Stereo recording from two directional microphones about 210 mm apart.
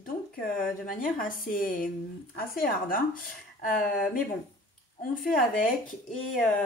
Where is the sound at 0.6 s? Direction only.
40° left (ahead or behind).